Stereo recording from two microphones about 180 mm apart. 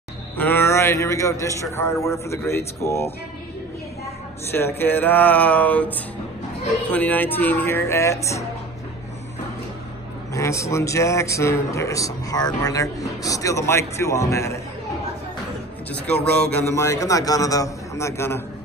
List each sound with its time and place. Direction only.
0.4 s a man's voice: 10° left (ahead or behind)
4.5 s a man's voice: 10° left (ahead or behind)
10.3 s a man's voice: 15° left (ahead or behind)
16.4 s a man's voice: 15° left (ahead or behind)